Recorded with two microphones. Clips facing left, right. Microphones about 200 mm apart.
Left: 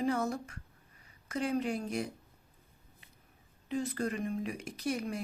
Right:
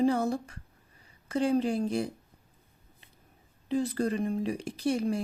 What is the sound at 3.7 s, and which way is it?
Speech, 35° right (ahead or behind).